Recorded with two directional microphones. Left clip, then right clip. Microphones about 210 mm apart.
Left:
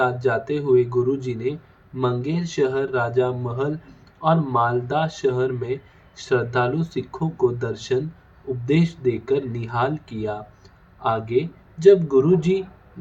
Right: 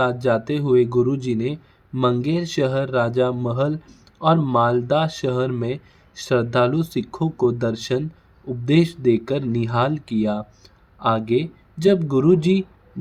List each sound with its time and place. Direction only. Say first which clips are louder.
0.0 s speech: right 1 dB; 50° right (ahead or behind)